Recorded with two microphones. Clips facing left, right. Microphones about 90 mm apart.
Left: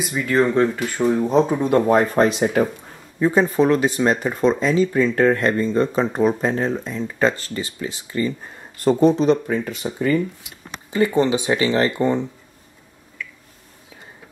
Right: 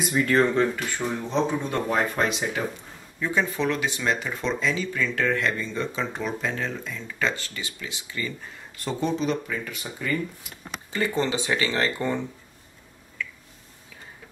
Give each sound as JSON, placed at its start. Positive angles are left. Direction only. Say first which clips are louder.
{"t": 0.0, "sound": "speech", "louder": "left 2 dB", "side_deg": 5}
{"t": 1.6, "sound": "speech", "louder": "left 9 dB", "side_deg": 50}
{"t": 10.9, "sound": "speech", "louder": "left 8 dB", "side_deg": 15}